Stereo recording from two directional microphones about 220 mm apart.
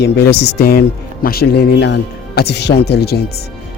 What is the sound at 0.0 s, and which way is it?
Speech, 50° left (ahead or behind).